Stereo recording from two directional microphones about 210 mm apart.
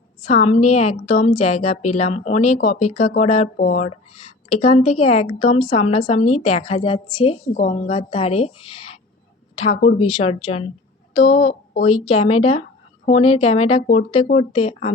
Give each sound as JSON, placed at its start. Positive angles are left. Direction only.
{"t": 0.3, "sound": "a woman's voice", "side_deg": 30}